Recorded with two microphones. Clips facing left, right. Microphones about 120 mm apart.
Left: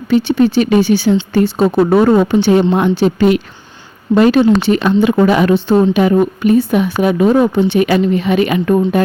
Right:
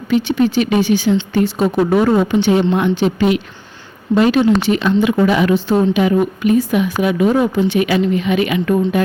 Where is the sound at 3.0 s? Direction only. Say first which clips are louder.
Left 3 dB; 45° left (ahead or behind).